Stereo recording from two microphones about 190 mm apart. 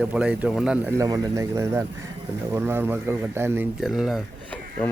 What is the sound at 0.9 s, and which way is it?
A man's voice, 20° right (ahead or behind).